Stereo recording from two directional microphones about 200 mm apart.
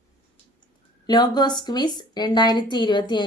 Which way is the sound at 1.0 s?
20° left (ahead or behind).